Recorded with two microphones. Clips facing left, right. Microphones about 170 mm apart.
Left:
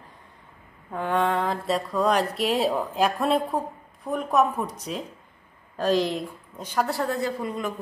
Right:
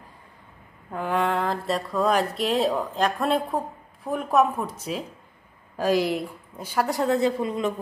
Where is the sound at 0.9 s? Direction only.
Centre (ahead or behind).